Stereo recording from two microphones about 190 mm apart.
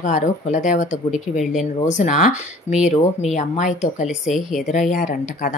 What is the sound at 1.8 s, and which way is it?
Speech, 40° left (ahead or behind).